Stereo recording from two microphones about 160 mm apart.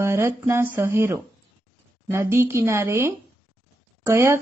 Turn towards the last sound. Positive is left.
turn(degrees=-15)  # may be behind; listen again after turning